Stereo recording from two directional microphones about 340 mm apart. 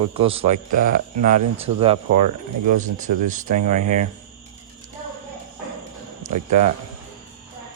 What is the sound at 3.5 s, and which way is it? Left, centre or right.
Speech, right.